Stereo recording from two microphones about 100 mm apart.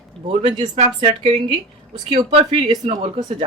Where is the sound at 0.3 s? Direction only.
70° right (ahead or behind).